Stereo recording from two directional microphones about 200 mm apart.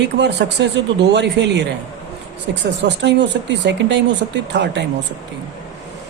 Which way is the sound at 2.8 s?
60° right (ahead or behind).